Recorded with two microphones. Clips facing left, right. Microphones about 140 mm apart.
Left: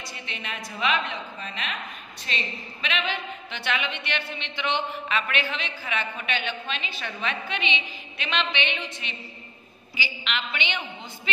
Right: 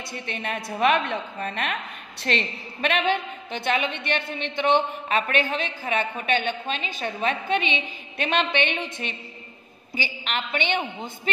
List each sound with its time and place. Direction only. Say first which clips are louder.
0.3 s a woman's voice: right 7 dB; 50° right (ahead or behind)